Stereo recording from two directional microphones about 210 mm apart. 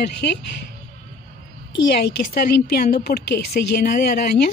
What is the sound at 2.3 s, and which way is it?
A woman's voice, 50° left (ahead or behind).